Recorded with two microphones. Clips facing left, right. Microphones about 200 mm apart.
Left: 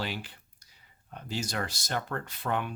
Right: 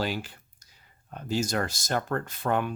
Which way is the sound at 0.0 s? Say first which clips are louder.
Right 5 dB; 45° right (ahead or behind).